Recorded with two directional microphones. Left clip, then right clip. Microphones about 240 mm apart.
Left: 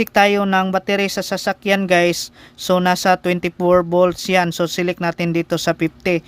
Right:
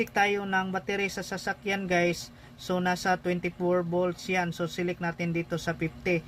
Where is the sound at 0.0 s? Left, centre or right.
Left.